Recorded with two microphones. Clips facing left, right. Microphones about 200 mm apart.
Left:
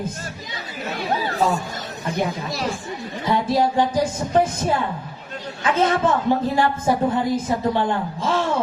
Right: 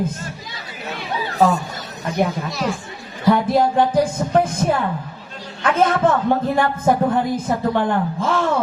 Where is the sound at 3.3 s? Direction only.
55° right (ahead or behind).